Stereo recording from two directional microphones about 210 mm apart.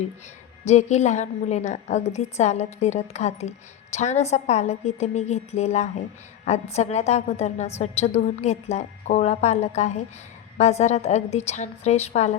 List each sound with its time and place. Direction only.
0.6 s a woman's voice: 30° left (ahead or behind)